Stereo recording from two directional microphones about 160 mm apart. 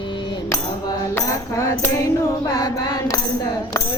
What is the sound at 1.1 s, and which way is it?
Tambourine, 20° left (ahead or behind).